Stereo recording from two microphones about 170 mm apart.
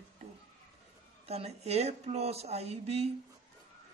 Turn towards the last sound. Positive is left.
turn(degrees=-35)  # may be behind; listen again after turning